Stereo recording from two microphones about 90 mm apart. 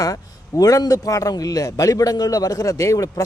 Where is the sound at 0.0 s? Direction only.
40° left (ahead or behind).